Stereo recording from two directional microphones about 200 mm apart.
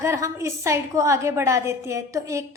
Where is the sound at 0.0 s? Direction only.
15° right (ahead or behind).